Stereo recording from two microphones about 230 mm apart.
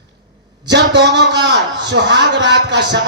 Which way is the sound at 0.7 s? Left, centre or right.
Right.